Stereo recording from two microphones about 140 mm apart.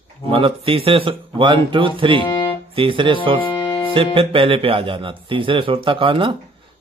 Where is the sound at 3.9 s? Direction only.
40° right (ahead or behind).